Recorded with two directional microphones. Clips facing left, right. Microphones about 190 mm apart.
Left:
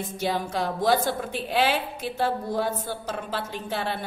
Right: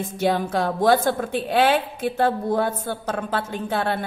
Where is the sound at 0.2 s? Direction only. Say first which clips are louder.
Right 6 dB; 55° right (ahead or behind).